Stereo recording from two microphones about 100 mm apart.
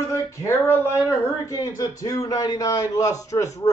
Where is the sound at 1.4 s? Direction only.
35° left (ahead or behind).